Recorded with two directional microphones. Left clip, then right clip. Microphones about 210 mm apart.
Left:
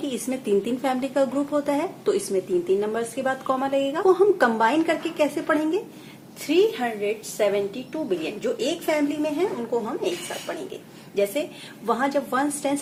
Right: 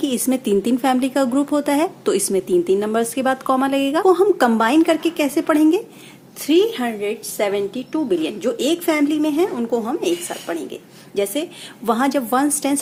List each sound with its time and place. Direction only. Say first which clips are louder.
0.0 s speech: right 7 dB; 45° right (ahead or behind)
11.1 s speech: right 2 dB; 50° right (ahead or behind)